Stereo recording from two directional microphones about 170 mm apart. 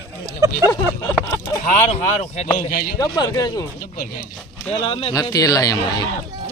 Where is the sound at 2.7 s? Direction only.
60° left (ahead or behind).